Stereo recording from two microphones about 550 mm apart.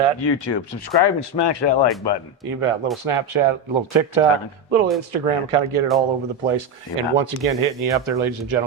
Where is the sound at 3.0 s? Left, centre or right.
Right.